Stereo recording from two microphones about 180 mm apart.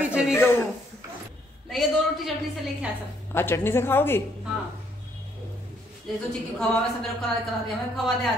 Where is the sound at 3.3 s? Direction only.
15° left (ahead or behind).